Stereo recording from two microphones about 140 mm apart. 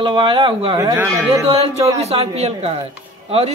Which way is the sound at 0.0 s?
35° right (ahead or behind).